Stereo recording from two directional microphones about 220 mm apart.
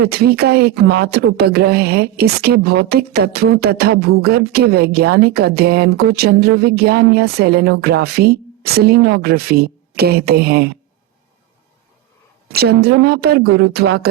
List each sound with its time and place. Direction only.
0.0 s speech: 45° right (ahead or behind)
12.5 s speech: 45° right (ahead or behind)